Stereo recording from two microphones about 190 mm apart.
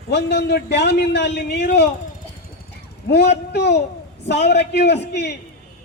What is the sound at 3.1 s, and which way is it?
A man's voice, 60° left (ahead or behind).